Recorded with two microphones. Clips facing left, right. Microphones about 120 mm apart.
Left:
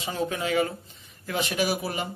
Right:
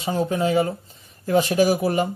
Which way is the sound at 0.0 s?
35° right (ahead or behind).